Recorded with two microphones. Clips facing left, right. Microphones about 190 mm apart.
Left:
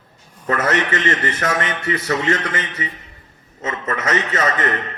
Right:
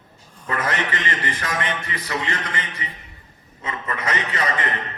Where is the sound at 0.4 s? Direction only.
45° left (ahead or behind).